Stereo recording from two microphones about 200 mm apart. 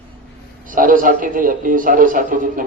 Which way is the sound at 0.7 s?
45° right (ahead or behind).